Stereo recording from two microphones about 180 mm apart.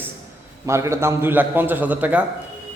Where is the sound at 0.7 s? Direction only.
15° right (ahead or behind).